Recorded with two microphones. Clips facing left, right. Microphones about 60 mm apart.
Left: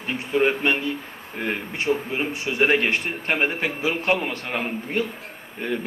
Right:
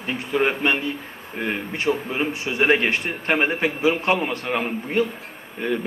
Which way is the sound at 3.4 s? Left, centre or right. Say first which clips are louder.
Right 4 dB; right.